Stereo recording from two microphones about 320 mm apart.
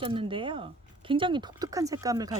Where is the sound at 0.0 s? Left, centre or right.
Centre.